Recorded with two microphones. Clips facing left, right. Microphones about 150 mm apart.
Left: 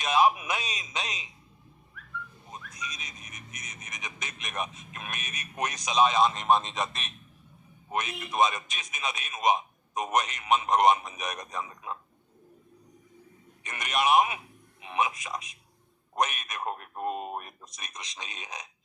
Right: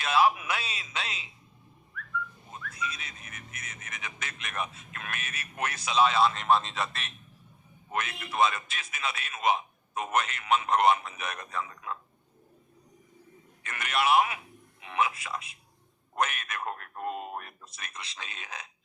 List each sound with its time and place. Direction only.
0.0 s a man's voice: 15° left (ahead or behind)
2.5 s a man's voice: 15° left (ahead or behind)
13.6 s a man's voice: 20° left (ahead or behind)